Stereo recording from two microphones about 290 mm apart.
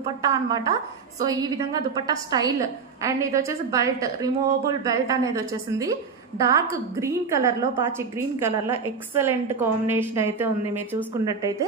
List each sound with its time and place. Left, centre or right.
0.0 s a woman's voice: centre